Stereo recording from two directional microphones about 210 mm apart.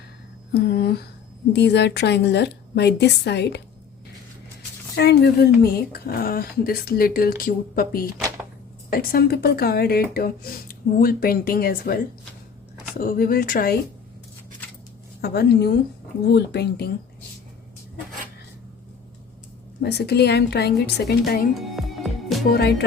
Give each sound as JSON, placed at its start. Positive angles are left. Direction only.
{"t": 0.5, "sound": "speech", "side_deg": 50}
{"t": 4.9, "sound": "speech", "side_deg": 50}
{"t": 13.0, "sound": "speech", "side_deg": 45}
{"t": 15.2, "sound": "speech", "side_deg": 50}
{"t": 19.8, "sound": "speech", "side_deg": 50}
{"t": 21.5, "sound": "music", "side_deg": 0}